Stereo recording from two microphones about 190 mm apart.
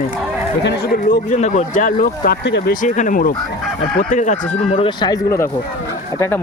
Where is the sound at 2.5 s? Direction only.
70° left (ahead or behind).